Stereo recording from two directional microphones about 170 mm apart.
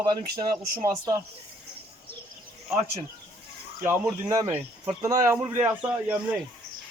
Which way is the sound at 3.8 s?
15° right (ahead or behind).